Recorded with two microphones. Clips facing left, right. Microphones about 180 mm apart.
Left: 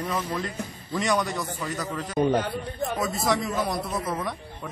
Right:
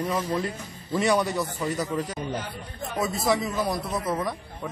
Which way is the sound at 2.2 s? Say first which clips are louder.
Left 9 dB; 60° left (ahead or behind).